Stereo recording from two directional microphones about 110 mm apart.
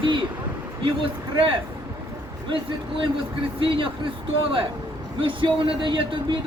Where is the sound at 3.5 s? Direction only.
55° right (ahead or behind).